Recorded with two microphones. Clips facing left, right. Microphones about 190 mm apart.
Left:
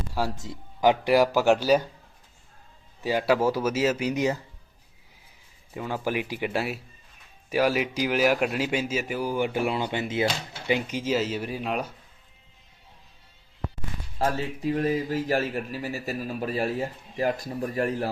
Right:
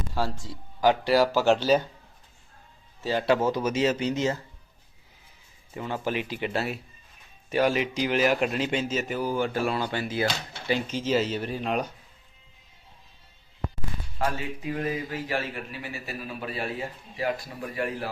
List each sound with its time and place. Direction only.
0.1 s a man's voice: 15° left (ahead or behind)
3.0 s a man's voice: 15° left (ahead or behind)
5.7 s a man's voice: 10° left (ahead or behind)
15.1 s a man's voice: 40° left (ahead or behind)